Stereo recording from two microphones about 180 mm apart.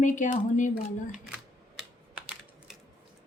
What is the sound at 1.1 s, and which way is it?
Camera, 5° right (ahead or behind).